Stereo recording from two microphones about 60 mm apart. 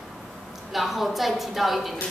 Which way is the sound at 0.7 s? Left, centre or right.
Centre.